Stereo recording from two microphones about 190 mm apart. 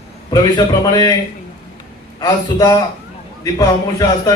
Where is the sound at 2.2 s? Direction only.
20° left (ahead or behind).